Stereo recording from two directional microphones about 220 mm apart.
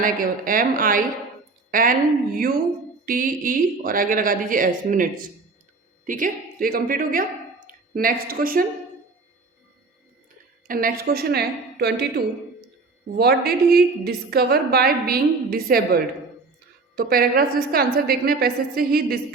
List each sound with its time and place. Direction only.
0.0 s speech: 40° right (ahead or behind)
10.7 s a woman's voice: 40° right (ahead or behind)